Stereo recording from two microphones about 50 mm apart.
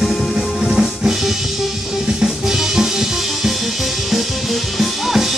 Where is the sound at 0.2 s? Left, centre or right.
Centre.